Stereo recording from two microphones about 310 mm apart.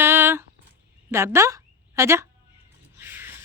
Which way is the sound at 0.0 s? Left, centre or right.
Centre.